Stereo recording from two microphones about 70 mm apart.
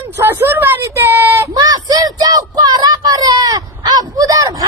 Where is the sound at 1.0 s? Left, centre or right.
Right.